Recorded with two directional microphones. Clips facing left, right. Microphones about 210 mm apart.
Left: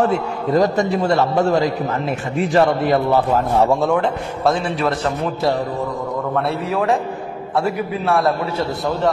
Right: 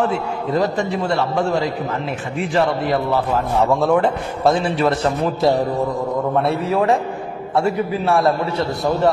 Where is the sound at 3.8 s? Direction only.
Centre (ahead or behind).